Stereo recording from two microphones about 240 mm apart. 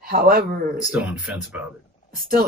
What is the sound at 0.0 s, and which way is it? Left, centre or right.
Speech, right.